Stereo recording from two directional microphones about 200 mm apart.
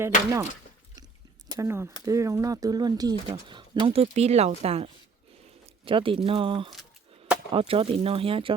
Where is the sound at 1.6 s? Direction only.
15° right (ahead or behind).